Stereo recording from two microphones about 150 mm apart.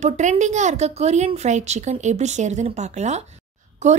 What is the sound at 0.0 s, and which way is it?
Speech, 50° right (ahead or behind).